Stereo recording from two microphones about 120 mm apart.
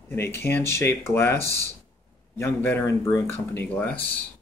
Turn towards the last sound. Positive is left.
turn(degrees=15)  # may be behind; listen again after turning